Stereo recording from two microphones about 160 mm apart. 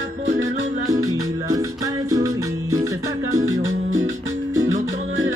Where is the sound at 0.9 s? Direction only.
20° right (ahead or behind).